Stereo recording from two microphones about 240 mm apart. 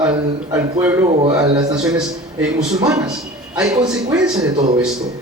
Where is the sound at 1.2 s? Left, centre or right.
Centre.